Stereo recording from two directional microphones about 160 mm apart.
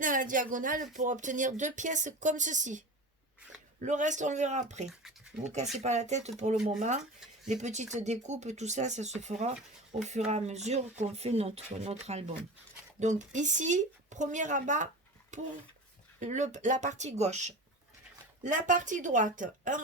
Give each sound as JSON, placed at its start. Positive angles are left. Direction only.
{"t": 0.0, "sound": "speech", "side_deg": -55}